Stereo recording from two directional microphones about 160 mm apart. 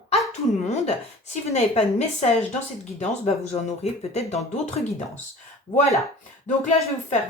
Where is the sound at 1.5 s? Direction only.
40° left (ahead or behind).